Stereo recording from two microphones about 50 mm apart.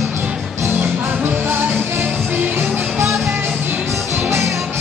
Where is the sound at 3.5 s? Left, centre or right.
Right.